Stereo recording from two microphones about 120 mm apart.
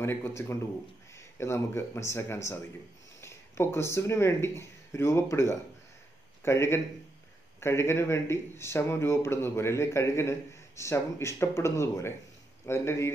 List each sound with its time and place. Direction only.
0.0 s speech: 20° left (ahead or behind)